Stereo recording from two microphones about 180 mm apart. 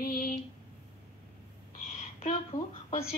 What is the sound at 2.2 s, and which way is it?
Speech, 35° left (ahead or behind).